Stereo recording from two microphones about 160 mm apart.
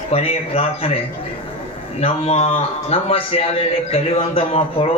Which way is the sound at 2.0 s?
40° left (ahead or behind).